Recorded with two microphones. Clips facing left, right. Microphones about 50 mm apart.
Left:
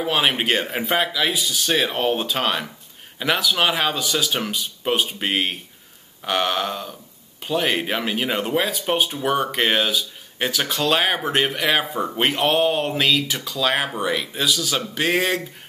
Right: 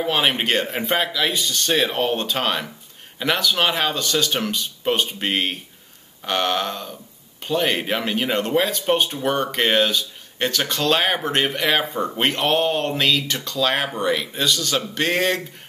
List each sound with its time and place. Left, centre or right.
0.0 s speech: centre